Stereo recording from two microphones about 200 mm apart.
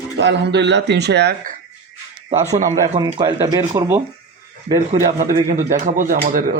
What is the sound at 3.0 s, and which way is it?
Speech, 20° right (ahead or behind).